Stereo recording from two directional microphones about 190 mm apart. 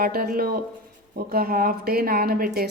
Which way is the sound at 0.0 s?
50° right (ahead or behind).